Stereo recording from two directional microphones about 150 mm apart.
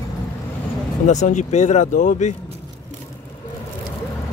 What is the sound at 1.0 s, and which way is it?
Speech, 55° left (ahead or behind).